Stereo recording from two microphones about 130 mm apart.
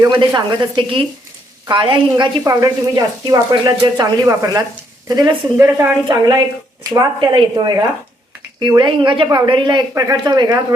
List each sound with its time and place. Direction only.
0.0 s speech: 35° right (ahead or behind)
2.4 s speech: 25° right (ahead or behind)